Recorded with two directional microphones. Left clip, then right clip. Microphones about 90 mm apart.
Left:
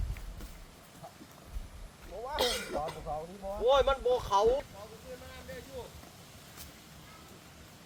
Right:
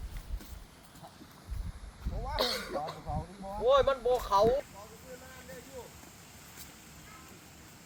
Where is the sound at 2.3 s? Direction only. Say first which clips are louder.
Left 1 dB; 15° left (ahead or behind).